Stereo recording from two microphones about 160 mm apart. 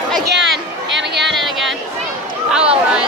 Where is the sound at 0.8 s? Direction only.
90° right.